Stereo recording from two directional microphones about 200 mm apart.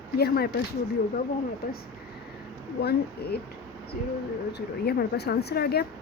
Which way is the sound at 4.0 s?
45° left (ahead or behind).